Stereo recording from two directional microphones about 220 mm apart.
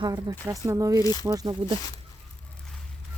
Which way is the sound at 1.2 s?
15° right (ahead or behind).